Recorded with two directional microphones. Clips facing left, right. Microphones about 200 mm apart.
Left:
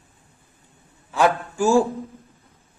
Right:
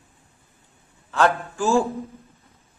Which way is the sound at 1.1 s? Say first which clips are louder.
Left 1 dB; 15° left (ahead or behind).